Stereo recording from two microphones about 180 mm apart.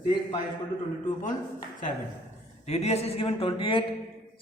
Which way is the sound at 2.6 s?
35° left (ahead or behind).